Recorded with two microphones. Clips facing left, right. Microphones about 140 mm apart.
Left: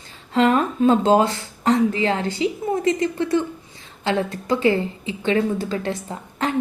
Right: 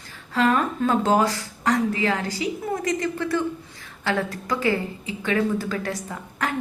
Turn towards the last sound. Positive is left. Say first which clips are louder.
# left 4 dB
turn(degrees=25)  # may be behind; listen again after turning